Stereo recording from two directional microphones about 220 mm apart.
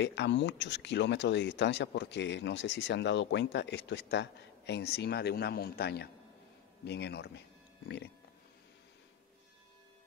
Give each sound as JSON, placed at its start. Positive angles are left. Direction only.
{"t": 0.0, "sound": "speech", "side_deg": 55}